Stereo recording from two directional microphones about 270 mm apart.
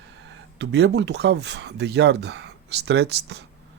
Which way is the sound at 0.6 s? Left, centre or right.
Right.